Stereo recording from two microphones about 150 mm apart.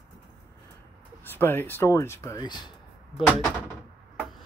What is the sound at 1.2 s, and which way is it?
Speech, 15° left (ahead or behind).